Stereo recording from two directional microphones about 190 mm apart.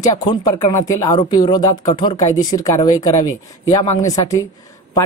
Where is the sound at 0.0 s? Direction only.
20° left (ahead or behind).